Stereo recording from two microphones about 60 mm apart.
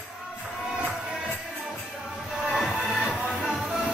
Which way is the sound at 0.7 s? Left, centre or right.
Centre.